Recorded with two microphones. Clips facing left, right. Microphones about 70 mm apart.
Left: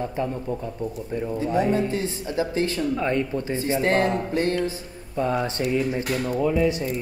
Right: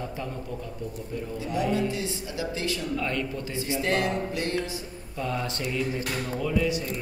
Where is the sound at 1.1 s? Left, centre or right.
Left.